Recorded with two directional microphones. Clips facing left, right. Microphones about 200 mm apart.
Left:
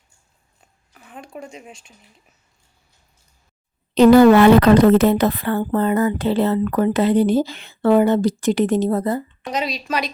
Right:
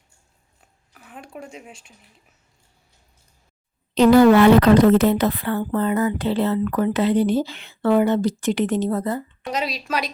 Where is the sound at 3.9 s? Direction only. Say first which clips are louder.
Left 3 dB; 50° left (ahead or behind); by 9.2 s 35° left (ahead or behind).